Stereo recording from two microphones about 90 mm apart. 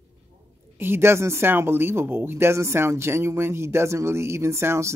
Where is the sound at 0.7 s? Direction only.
25° right (ahead or behind).